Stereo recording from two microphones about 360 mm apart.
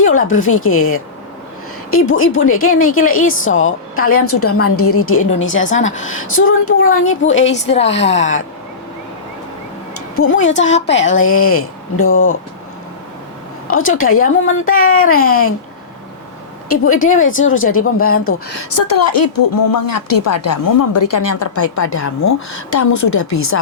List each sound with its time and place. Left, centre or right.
0.0 s a woman's voice: left
7.5 s a woman's voice: centre
9.9 s a sound: left
10.8 s a woman's voice: left
13.7 s a woman's voice: left
16.6 s a woman's voice: left
18.7 s speech: left